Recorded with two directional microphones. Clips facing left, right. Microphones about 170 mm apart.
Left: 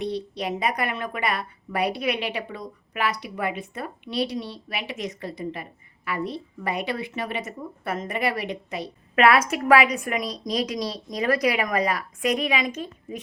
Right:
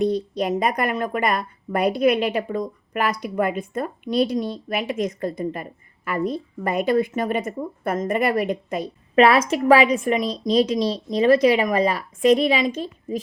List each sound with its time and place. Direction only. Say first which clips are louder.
0.0 s a woman's voice: right 7 dB; 45° right (ahead or behind)
9.1 s a woman's voice: right 3 dB; 30° right (ahead or behind)